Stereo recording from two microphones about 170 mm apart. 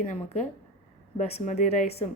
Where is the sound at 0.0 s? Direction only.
45° left (ahead or behind).